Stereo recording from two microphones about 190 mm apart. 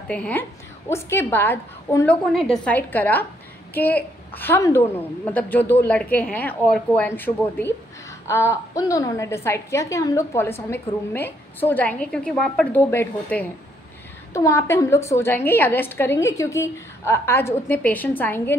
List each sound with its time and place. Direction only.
0.1 s a woman's voice: 10° left (ahead or behind)